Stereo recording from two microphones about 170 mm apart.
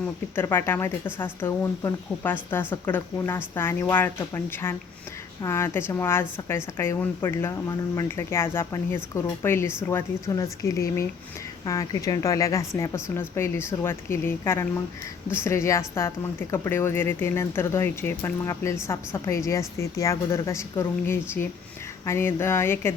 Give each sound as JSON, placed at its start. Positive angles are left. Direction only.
{"t": 0.3, "sound": "speech", "side_deg": 15}